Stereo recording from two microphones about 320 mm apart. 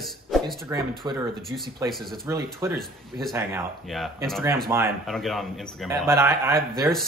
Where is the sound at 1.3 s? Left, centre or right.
Centre.